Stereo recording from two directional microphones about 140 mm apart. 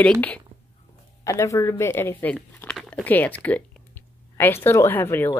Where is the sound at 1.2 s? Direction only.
20° left (ahead or behind).